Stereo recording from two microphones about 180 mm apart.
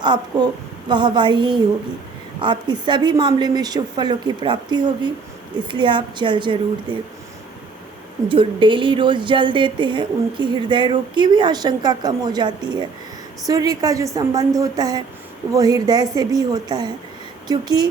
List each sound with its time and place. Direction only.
0.0 s speech: 25° right (ahead or behind)
8.3 s speech: 30° right (ahead or behind)